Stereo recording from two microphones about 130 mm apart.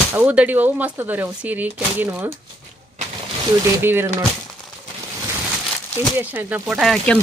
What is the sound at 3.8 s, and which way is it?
Speech, 15° right (ahead or behind).